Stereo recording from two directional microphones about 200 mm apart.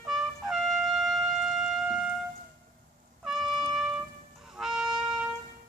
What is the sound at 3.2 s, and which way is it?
Music, centre (ahead or behind).